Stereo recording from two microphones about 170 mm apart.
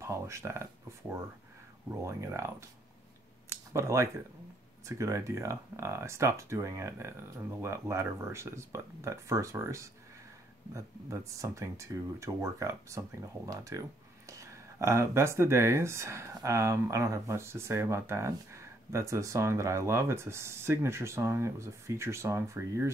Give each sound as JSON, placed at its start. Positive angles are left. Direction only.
{"t": 0.0, "sound": "speech", "side_deg": -15}
{"t": 2.0, "sound": "speech", "side_deg": -15}
{"t": 3.7, "sound": "speech", "side_deg": -15}